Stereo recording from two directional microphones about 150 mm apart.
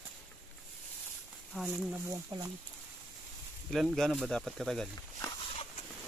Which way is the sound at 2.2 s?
25° right (ahead or behind).